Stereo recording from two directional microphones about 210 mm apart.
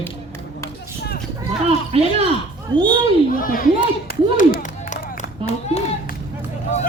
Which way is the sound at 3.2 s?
40° left (ahead or behind).